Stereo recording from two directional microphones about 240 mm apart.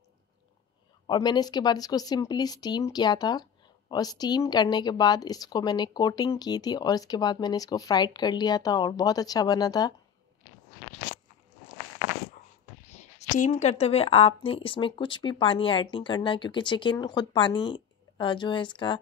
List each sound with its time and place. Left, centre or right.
1.0 s a woman's voice: centre
12.9 s a woman's voice: left